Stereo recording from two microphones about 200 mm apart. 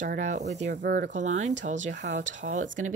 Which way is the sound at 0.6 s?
55° right (ahead or behind).